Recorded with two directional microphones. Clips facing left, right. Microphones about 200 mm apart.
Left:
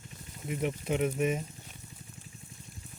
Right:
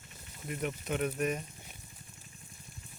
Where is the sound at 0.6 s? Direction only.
25° left (ahead or behind).